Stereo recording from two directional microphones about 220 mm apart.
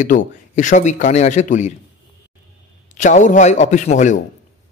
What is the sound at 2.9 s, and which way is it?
A man's voice, 35° left (ahead or behind).